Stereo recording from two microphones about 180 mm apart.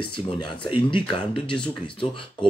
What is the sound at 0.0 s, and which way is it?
Speech, 25° left (ahead or behind).